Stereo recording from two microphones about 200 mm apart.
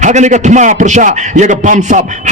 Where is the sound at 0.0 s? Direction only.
35° right (ahead or behind).